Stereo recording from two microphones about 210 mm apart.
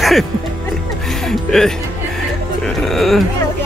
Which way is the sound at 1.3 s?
Centre (ahead or behind).